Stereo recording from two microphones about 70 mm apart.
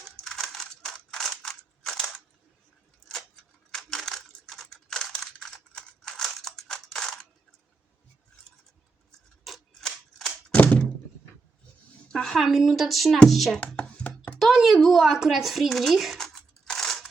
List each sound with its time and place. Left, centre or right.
0.0 s scissors: centre
3.7 s crushing: centre
5.2 s scissors: centre
9.4 s scissors: centre
10.6 s thunk: left
12.1 s speech: centre
13.6 s chopping: left
14.3 s a woman's voice: centre
16.1 s crushing: centre